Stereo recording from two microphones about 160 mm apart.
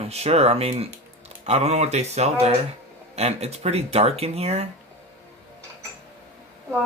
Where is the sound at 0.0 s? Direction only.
40° right (ahead or behind).